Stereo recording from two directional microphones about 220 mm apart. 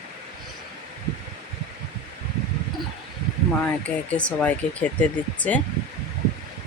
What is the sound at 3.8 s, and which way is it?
Speech, 5° left (ahead or behind).